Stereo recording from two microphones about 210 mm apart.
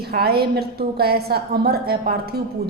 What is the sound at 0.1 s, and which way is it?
A woman's voice, 50° right (ahead or behind).